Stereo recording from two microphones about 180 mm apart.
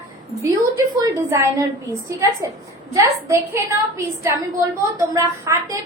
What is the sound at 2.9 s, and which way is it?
A woman's voice, 15° right (ahead or behind).